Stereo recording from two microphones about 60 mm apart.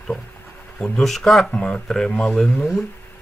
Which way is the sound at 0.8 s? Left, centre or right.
Centre.